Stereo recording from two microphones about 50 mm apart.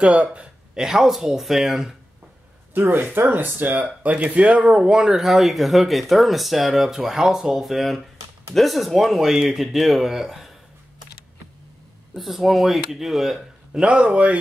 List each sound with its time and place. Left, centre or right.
0.0 s a man's voice: right
0.7 s speech: centre
2.7 s speech: right; by 10.5 s centre
12.2 s speech: centre
13.7 s a man's voice: right